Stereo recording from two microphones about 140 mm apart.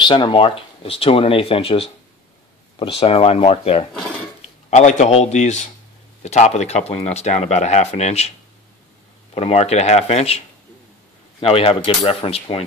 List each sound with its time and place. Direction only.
0.0 s speech: 35° left (ahead or behind)
4.6 s a man's voice: 60° left (ahead or behind)
9.3 s speech: 45° left (ahead or behind)
11.4 s speech: 40° left (ahead or behind)